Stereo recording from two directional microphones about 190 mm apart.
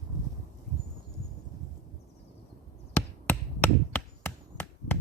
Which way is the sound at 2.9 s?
10° left (ahead or behind).